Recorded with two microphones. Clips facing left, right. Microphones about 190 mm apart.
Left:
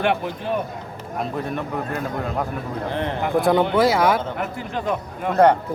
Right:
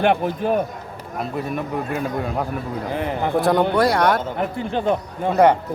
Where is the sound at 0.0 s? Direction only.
45° right (ahead or behind).